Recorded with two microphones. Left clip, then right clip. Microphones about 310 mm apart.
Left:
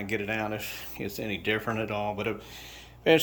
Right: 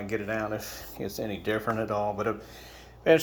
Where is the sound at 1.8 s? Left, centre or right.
Centre.